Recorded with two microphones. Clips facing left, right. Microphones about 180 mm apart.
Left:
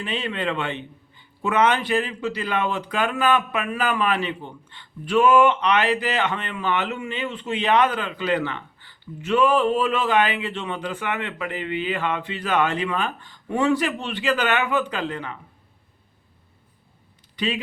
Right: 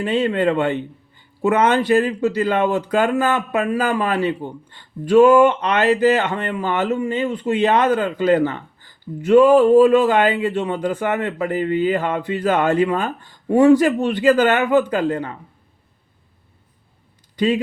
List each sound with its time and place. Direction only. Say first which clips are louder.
0.0 s a man's voice: right 9 dB; 45° right (ahead or behind)
17.3 s speech: right 8 dB; 45° right (ahead or behind)